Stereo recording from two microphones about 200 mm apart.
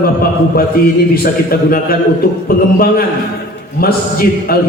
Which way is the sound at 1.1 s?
45° left (ahead or behind).